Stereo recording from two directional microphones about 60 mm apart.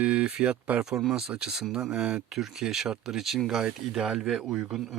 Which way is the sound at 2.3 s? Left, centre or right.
Centre.